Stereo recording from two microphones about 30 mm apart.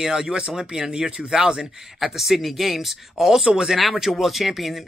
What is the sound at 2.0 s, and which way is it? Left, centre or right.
Speech, centre.